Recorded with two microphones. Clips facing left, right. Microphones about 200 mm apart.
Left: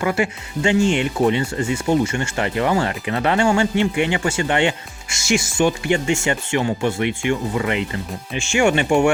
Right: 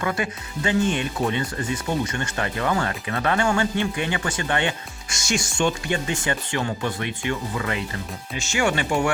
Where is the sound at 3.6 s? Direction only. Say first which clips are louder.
Left 5 dB; 15° left (ahead or behind).